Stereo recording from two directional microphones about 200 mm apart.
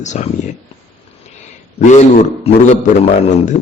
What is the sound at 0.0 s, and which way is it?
Speech, 35° left (ahead or behind).